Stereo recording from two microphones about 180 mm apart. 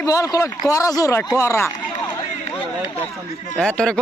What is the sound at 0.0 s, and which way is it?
A man's voice, 20° left (ahead or behind).